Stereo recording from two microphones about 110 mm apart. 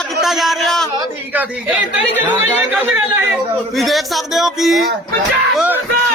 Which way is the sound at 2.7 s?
15° right (ahead or behind).